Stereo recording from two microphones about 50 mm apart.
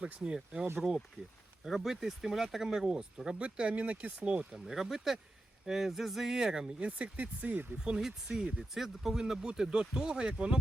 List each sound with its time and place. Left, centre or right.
0.0 s speech: right
6.7 s speech: right
7.8 s speech: centre